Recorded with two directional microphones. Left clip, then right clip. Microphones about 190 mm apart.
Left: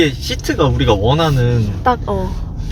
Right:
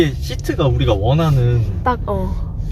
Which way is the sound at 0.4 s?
50° left (ahead or behind).